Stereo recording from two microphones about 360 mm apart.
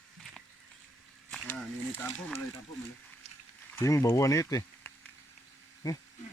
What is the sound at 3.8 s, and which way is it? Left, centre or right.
Speech, centre.